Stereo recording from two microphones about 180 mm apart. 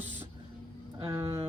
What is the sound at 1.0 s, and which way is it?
Music, 20° right (ahead or behind).